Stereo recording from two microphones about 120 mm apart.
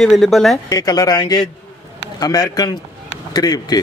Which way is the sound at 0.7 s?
30° left (ahead or behind).